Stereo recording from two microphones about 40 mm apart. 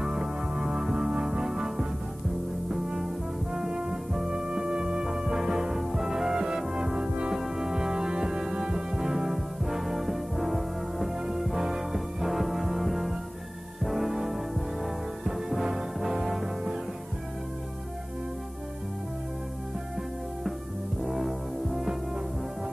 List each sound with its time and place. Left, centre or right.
0.0 s music: centre
3.5 s music: centre
7.3 s music: centre
21.0 s music: centre